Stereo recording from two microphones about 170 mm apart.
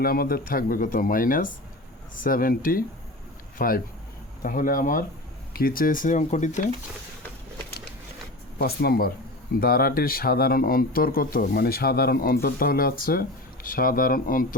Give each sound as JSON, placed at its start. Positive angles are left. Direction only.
{"t": 0.0, "sound": "speech", "side_deg": 60}
{"t": 8.5, "sound": "speech", "side_deg": 65}